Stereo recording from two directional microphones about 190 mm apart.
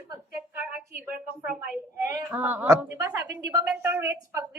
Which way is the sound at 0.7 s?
10° right (ahead or behind).